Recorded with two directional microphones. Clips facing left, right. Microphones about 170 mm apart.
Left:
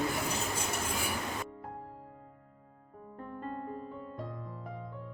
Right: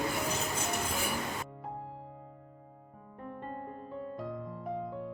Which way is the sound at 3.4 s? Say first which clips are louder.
Left 4 dB; centre (ahead or behind).